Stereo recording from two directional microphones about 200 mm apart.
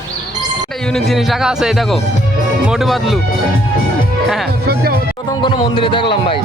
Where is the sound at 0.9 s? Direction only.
Centre (ahead or behind).